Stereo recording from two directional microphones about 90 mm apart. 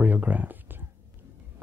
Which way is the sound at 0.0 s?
20° right (ahead or behind).